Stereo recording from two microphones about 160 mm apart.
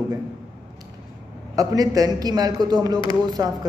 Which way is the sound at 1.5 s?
20° right (ahead or behind).